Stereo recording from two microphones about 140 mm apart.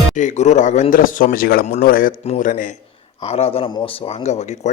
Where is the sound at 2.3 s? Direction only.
65° left (ahead or behind).